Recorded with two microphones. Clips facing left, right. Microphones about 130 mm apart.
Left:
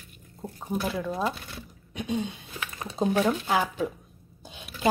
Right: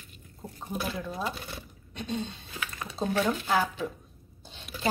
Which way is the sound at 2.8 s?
20° left (ahead or behind).